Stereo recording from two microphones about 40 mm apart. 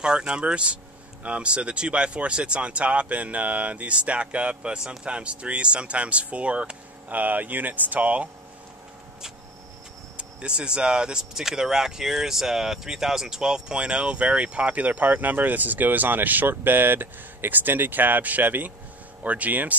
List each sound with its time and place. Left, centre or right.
0.0 s speech: right
7.1 s speech: right
10.1 s speech: right
19.2 s speech: right